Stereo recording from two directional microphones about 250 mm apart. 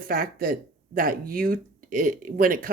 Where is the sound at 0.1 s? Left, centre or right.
Right.